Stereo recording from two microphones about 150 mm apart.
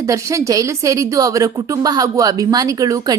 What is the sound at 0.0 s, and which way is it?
A woman's voice, 20° right (ahead or behind).